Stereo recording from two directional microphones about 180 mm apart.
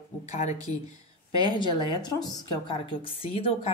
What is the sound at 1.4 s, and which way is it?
A woman's voice, 25° left (ahead or behind).